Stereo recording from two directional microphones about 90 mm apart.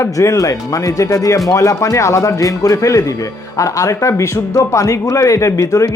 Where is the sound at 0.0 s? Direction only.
35° left (ahead or behind).